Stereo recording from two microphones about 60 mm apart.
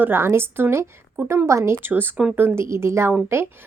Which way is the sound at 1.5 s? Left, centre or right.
Right.